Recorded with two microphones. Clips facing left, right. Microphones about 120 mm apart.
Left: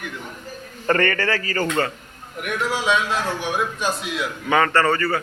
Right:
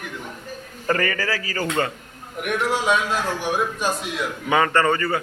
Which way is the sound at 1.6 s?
20° right (ahead or behind).